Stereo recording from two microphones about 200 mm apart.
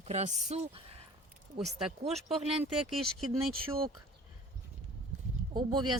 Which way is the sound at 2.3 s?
30° right (ahead or behind).